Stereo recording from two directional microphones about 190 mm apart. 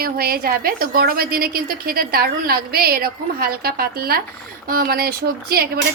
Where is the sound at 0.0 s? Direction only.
50° right (ahead or behind).